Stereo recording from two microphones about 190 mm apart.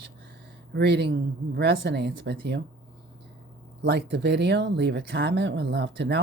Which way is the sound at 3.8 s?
60° right (ahead or behind).